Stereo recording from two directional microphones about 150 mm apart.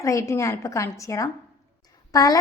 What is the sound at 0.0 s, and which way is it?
A woman's voice, 20° left (ahead or behind).